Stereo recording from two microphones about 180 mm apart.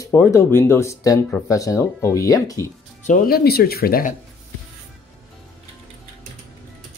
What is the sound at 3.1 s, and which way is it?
Speech, 60° left (ahead or behind).